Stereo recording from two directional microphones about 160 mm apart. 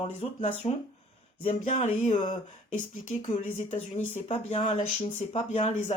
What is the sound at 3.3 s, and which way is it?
Speech, 45° left (ahead or behind).